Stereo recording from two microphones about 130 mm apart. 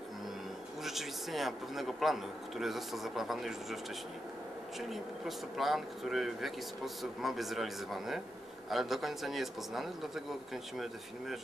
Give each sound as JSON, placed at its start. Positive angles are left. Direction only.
{"t": 0.8, "sound": "speech", "side_deg": 0}
{"t": 4.7, "sound": "speech", "side_deg": 0}